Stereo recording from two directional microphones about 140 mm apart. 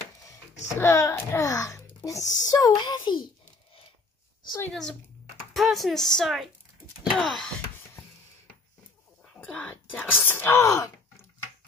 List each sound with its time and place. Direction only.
0.7 s a child's voice: 20° left (ahead or behind)
5.5 s a woman's voice: centre (ahead or behind)
9.3 s speech: 10° left (ahead or behind)